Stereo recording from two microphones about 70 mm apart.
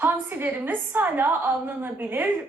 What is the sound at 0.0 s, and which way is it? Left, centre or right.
A woman's voice, right.